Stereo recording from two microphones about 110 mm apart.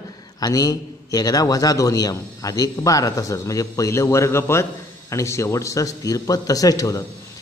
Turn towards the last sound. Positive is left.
turn(degrees=35)  # may be behind; listen again after turning